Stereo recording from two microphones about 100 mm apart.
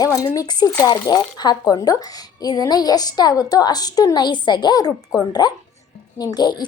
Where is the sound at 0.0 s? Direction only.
35° left (ahead or behind).